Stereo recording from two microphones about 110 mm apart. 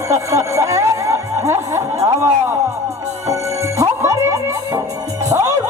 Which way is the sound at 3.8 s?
25° right (ahead or behind).